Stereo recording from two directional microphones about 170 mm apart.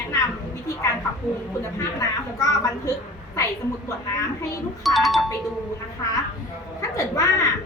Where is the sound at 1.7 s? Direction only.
20° left (ahead or behind).